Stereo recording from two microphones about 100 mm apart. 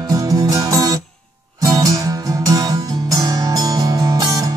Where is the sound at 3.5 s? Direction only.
35° right (ahead or behind).